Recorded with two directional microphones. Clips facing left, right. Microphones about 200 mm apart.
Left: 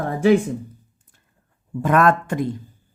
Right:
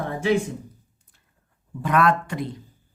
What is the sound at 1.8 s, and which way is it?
Speech, 45° left (ahead or behind).